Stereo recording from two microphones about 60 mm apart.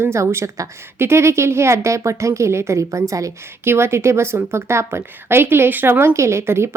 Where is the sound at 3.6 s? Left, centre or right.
Right.